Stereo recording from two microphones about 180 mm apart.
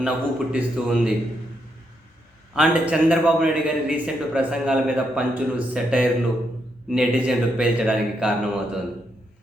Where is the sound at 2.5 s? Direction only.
5° right (ahead or behind).